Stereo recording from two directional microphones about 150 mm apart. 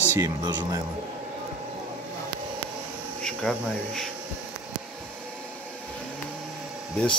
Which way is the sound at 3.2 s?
Centre (ahead or behind).